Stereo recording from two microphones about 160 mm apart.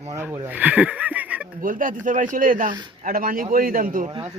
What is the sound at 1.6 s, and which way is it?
Speech, 60° right (ahead or behind).